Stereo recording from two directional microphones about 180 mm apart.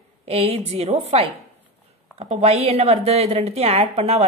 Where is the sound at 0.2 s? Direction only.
35° right (ahead or behind).